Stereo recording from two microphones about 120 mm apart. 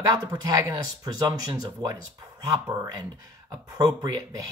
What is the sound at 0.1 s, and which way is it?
Speech, 30° right (ahead or behind).